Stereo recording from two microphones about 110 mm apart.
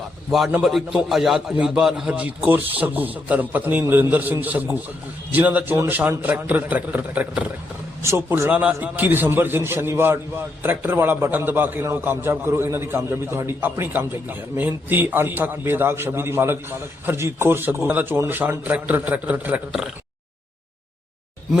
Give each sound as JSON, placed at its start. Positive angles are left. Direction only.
{"t": 0.3, "sound": "a man's voice", "side_deg": 0}
{"t": 5.7, "sound": "a man's voice", "side_deg": -25}
{"t": 6.0, "sound": "a man's voice", "side_deg": -15}
{"t": 8.0, "sound": "a man's voice", "side_deg": -25}
{"t": 8.4, "sound": "a man's voice", "side_deg": -15}